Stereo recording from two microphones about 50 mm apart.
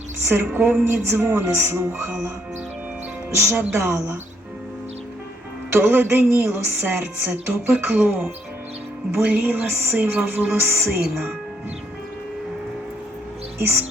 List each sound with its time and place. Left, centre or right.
0.3 s speech: right
3.5 s speech: right
3.8 s speech: right
5.7 s speech: right
6.2 s speech: right
13.6 s speech: right